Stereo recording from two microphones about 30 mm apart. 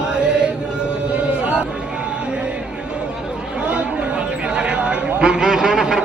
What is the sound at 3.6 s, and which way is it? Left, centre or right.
Chatter, right.